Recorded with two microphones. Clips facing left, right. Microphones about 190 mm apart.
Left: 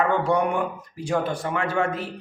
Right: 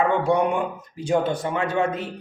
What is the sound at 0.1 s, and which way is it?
Speech, 15° right (ahead or behind).